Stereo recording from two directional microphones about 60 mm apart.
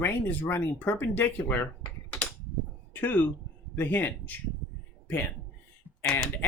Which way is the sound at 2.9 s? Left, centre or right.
Left.